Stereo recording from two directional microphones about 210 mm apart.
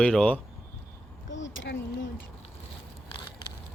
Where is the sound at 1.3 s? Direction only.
60° left (ahead or behind).